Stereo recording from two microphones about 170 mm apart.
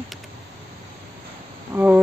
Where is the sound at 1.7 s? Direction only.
10° right (ahead or behind).